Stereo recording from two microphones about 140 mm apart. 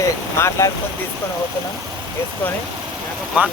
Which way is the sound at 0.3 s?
20° left (ahead or behind).